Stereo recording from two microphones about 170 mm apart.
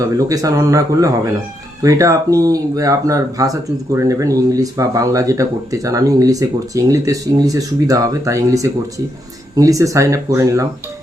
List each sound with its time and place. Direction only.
0.0 s speech: 20° right (ahead or behind)